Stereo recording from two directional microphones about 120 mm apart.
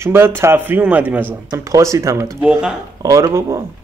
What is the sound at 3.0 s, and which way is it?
Speech, 30° right (ahead or behind).